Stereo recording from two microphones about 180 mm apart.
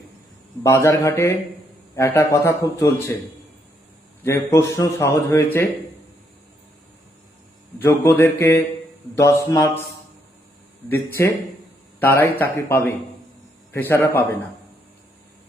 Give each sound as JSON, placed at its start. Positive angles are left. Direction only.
{"t": 0.6, "sound": "a man's voice", "side_deg": 15}
{"t": 4.2, "sound": "a man's voice", "side_deg": 15}
{"t": 7.8, "sound": "a man's voice", "side_deg": 10}
{"t": 11.2, "sound": "a man's voice", "side_deg": 15}